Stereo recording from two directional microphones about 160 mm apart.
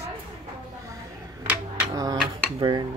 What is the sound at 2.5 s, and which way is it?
Dishes, 30° right (ahead or behind).